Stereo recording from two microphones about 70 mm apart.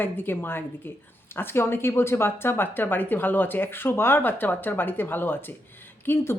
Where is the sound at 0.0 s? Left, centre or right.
Left.